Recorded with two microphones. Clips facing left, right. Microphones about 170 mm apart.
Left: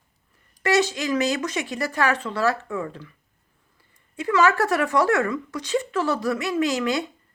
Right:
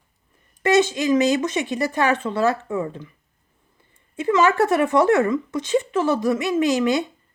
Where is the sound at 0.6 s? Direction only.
20° right (ahead or behind).